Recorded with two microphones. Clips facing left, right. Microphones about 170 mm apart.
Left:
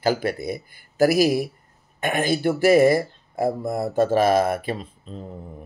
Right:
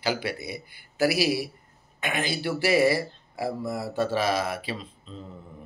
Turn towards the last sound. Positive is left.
turn(degrees=50)  # may be behind; listen again after turning